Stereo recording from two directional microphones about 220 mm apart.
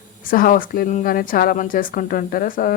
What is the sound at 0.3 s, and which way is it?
Speech, 40° left (ahead or behind).